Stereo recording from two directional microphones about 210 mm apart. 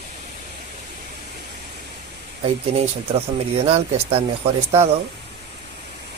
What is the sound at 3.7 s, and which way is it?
Speech, 30° right (ahead or behind).